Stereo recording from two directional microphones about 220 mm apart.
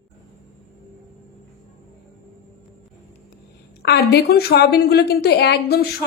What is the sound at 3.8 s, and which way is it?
A woman's voice, 45° left (ahead or behind).